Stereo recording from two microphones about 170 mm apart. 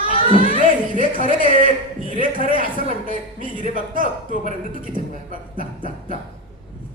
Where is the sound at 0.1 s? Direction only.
50° right (ahead or behind).